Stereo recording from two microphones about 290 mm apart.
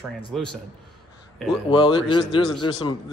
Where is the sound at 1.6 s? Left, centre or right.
Centre.